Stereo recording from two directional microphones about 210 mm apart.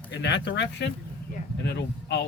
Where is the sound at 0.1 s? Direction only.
55° left (ahead or behind).